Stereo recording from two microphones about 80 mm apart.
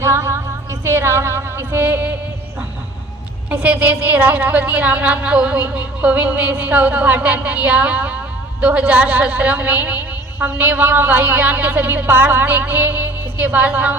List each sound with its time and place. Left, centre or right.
0.0 s female singing: right
3.5 s a woman's voice: right